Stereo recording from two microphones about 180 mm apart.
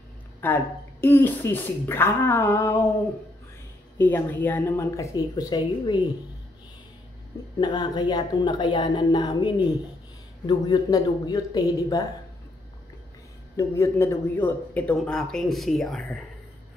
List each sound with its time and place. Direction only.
0.4 s a woman's voice: 10° left (ahead or behind)
4.0 s a woman's voice: 10° left (ahead or behind)
7.5 s a woman's voice: 20° left (ahead or behind)
13.6 s a woman's voice: 15° left (ahead or behind)